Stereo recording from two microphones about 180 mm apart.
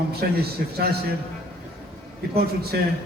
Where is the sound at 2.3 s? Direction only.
60° right (ahead or behind).